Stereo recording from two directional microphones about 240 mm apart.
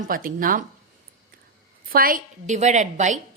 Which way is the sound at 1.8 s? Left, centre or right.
Right.